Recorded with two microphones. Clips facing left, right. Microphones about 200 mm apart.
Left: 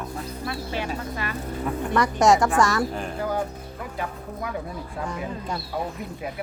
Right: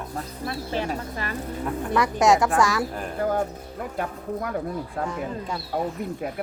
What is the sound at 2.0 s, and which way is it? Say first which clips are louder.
Speech: left 1 dB; centre (ahead or behind).